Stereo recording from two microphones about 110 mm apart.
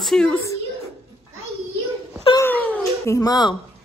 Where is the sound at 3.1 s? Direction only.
35° left (ahead or behind).